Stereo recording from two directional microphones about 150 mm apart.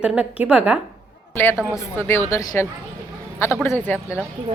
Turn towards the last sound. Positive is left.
turn(degrees=15)  # may be behind; listen again after turning